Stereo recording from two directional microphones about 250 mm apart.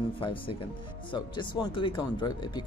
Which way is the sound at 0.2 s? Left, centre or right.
Left.